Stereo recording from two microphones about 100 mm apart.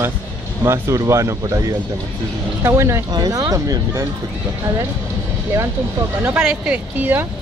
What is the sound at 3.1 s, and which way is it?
Speech, 40° right (ahead or behind).